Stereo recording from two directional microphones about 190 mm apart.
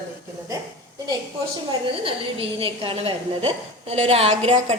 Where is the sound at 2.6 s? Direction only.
30° right (ahead or behind).